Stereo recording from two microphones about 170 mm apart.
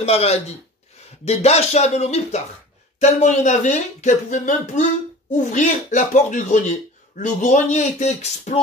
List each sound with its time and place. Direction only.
0.0 s speech: 35° left (ahead or behind)